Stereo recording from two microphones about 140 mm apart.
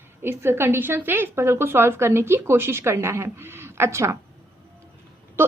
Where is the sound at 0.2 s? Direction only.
15° right (ahead or behind).